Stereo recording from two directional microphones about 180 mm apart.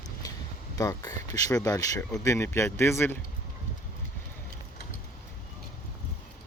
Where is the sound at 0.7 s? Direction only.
20° left (ahead or behind).